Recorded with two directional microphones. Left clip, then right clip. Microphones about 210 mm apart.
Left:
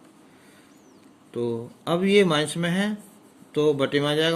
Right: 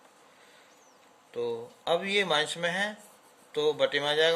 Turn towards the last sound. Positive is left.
turn(degrees=15)  # may be behind; listen again after turning